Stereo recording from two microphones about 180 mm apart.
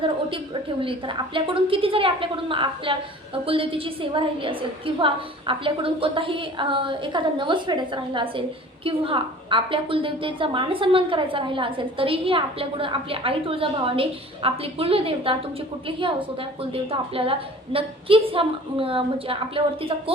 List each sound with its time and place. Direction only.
0.0 s a woman's voice: 30° right (ahead or behind)